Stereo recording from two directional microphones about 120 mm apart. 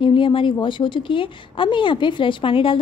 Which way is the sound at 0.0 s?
45° left (ahead or behind).